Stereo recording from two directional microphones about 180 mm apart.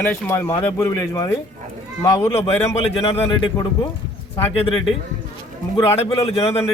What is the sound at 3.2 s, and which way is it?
A man's voice, 25° left (ahead or behind).